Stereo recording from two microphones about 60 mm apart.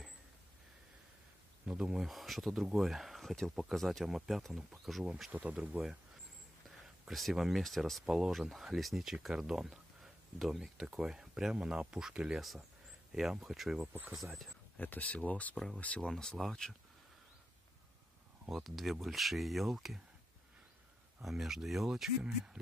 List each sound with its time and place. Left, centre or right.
1.7 s speech: centre
5.3 s speech: right
7.1 s speech: centre
8.0 s speech: centre
14.8 s speech: left
15.5 s speech: centre
18.5 s speech: centre
21.2 s speech: centre